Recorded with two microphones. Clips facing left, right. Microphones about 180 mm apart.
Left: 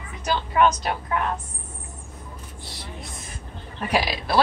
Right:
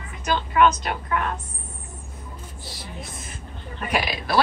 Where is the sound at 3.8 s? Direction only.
30° left (ahead or behind).